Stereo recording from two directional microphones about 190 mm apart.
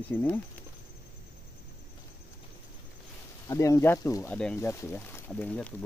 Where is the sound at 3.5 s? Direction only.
15° left (ahead or behind).